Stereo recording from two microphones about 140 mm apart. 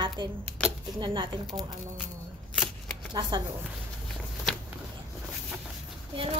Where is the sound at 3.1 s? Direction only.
30° right (ahead or behind).